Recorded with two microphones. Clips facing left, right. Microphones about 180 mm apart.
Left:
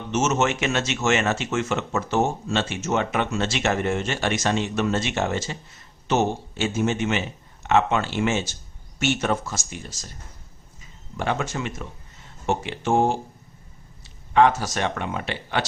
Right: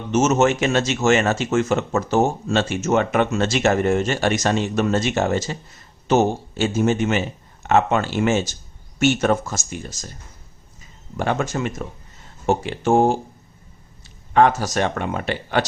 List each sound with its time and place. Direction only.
0.1 s speech: 40° right (ahead or behind)
11.2 s speech: 45° right (ahead or behind)